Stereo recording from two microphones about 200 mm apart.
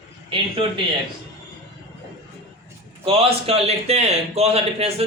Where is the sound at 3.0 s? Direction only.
30° right (ahead or behind).